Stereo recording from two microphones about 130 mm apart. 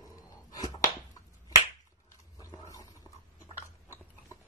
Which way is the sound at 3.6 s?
20° left (ahead or behind).